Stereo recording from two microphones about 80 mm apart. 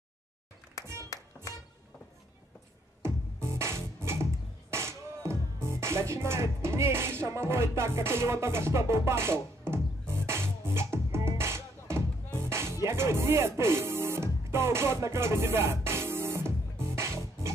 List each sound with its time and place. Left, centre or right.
3.0 s music: right